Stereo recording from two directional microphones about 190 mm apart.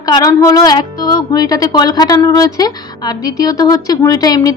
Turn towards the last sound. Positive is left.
turn(degrees=20)  # may be behind; listen again after turning